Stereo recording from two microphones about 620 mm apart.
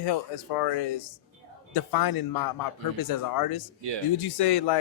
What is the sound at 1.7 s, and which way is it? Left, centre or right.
Speech, left.